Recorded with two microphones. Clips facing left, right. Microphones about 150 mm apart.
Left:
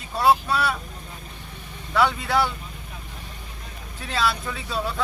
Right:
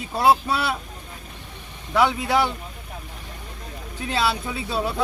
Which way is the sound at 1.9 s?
10° right (ahead or behind).